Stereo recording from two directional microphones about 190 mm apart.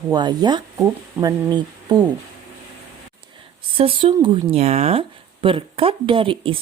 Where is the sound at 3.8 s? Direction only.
30° right (ahead or behind).